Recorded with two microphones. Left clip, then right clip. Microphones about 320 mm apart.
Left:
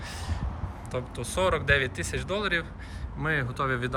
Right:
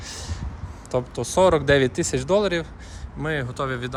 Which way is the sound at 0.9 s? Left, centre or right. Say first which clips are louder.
Right 9 dB; centre.